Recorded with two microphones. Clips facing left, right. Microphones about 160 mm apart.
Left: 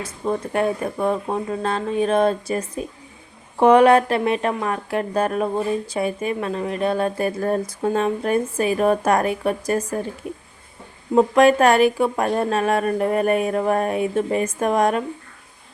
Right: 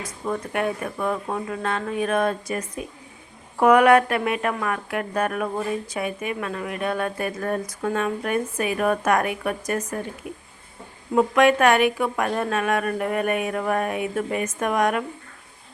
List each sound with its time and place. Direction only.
0.0 s speech: 30° left (ahead or behind)
11.1 s a woman's voice: 30° left (ahead or behind)